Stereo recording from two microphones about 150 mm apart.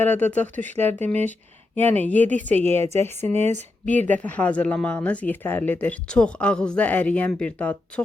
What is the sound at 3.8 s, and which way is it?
Speech, 10° left (ahead or behind).